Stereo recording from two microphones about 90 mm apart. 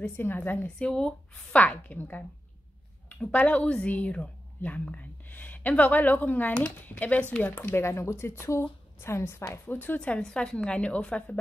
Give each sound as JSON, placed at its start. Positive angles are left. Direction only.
{"t": 0.0, "sound": "a woman's voice", "side_deg": 20}